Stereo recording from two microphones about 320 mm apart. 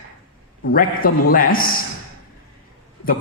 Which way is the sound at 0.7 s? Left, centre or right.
Left.